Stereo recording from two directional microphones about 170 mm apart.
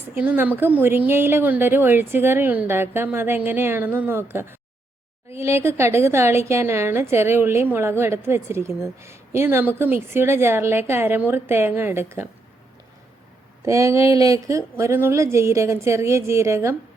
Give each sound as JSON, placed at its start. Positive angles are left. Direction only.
{"t": 0.1, "sound": "speech", "side_deg": -10}
{"t": 13.7, "sound": "speech", "side_deg": -20}